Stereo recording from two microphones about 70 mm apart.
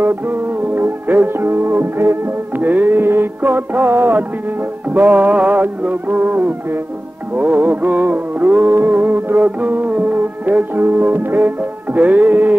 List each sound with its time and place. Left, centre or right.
0.0 s music: right